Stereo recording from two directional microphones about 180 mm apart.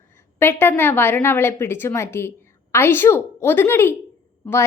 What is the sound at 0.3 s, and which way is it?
A woman's voice, 10° left (ahead or behind).